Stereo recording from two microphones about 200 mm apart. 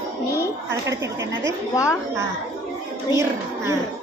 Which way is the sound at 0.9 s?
15° right (ahead or behind).